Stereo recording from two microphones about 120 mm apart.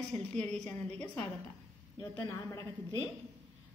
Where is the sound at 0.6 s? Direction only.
15° left (ahead or behind).